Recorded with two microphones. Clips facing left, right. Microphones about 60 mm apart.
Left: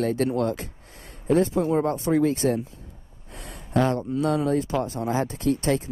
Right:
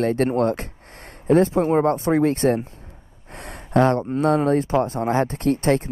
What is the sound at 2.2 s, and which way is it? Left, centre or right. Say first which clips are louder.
Speech: right 4 dB; right.